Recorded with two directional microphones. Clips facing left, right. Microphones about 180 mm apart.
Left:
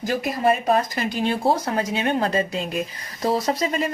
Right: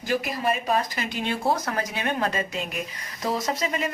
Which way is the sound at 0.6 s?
45° left (ahead or behind).